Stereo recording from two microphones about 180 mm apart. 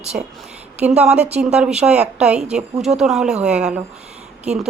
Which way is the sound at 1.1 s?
35° right (ahead or behind).